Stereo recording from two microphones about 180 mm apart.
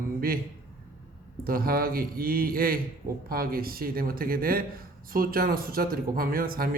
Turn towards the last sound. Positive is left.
turn(degrees=-55)  # may be behind; listen again after turning